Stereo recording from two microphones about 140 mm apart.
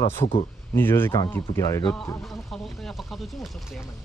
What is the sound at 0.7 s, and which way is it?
Speech, 15° left (ahead or behind).